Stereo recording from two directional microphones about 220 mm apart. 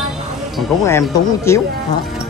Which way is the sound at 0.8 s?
15° left (ahead or behind).